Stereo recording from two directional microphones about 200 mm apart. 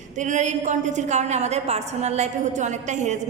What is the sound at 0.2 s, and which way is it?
A woman's voice, 35° right (ahead or behind).